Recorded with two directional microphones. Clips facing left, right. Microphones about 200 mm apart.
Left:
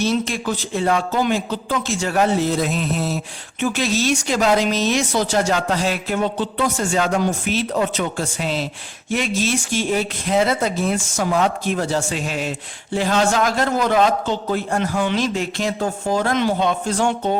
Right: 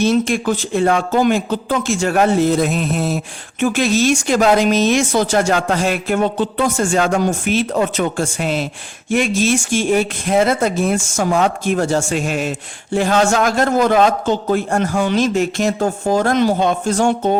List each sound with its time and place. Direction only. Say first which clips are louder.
0.0 s speech: right 5 dB; 50° right (ahead or behind)